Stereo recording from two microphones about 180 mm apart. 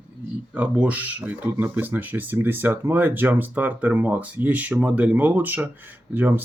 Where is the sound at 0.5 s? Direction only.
10° right (ahead or behind).